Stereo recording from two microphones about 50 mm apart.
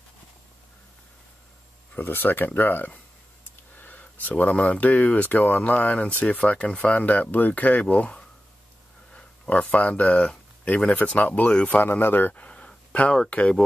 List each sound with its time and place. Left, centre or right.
2.0 s speech: left
12.4 s a sound: left
13.3 s speech: left